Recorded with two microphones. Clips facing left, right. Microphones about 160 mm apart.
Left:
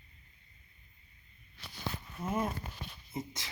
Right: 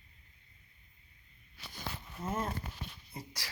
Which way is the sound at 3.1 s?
20° left (ahead or behind).